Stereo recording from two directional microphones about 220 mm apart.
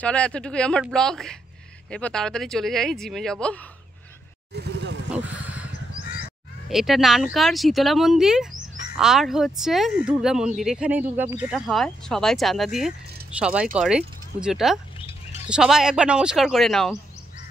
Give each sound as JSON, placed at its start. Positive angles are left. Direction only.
{"t": 0.0, "sound": "speech", "side_deg": 5}
{"t": 4.6, "sound": "vehicle", "side_deg": -50}
{"t": 5.1, "sound": "vehicle", "side_deg": -5}
{"t": 6.7, "sound": "speech", "side_deg": 0}
{"t": 15.0, "sound": "bird", "side_deg": 25}
{"t": 15.5, "sound": "speech", "side_deg": 0}